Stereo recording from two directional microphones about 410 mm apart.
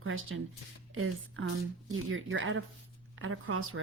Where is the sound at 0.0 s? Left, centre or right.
Right.